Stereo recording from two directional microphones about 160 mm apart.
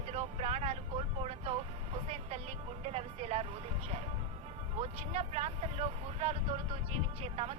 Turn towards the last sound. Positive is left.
turn(degrees=-40)  # may be behind; listen again after turning